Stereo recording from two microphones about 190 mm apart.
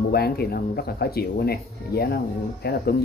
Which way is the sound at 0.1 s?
55° left (ahead or behind).